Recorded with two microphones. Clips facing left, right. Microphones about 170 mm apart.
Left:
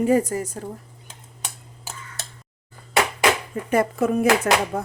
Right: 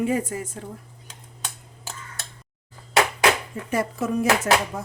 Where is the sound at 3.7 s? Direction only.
55° left (ahead or behind).